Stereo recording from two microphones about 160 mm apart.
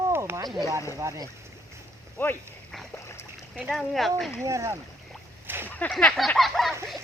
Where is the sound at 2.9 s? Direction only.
15° left (ahead or behind).